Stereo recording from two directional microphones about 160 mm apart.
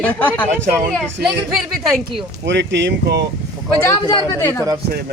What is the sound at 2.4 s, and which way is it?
Speech, 90° right.